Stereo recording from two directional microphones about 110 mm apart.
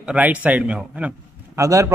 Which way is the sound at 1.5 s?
30° right (ahead or behind).